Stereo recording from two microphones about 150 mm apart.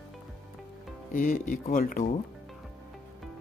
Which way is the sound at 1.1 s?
65° left (ahead or behind).